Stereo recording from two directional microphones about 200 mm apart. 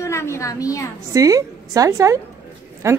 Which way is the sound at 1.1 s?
15° right (ahead or behind).